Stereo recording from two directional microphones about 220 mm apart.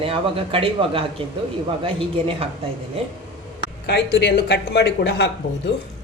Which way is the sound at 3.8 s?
50° left (ahead or behind).